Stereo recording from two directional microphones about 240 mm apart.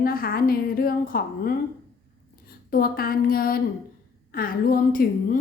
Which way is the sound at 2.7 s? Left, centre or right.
Left.